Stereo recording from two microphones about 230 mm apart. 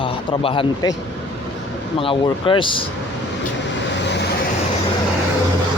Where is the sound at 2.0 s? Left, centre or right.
Left.